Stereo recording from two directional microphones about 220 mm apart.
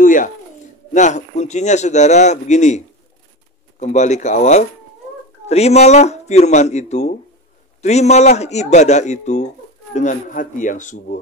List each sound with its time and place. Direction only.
0.0 s a sound: 35° left (ahead or behind)
0.9 s speech: 35° left (ahead or behind)
3.8 s speech: 30° left (ahead or behind)